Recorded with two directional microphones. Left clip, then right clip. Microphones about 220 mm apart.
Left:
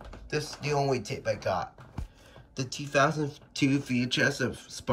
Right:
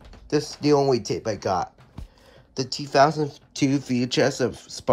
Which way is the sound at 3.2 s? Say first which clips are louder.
Right 5 dB; 10° right (ahead or behind).